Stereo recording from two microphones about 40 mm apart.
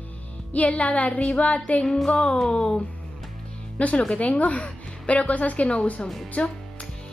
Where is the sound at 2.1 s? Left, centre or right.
Left.